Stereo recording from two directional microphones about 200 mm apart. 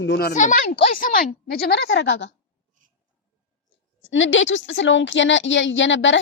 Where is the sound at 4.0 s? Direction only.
70° left (ahead or behind).